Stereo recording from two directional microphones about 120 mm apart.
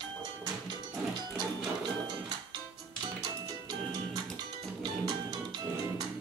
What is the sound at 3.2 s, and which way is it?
Music, 35° right (ahead or behind).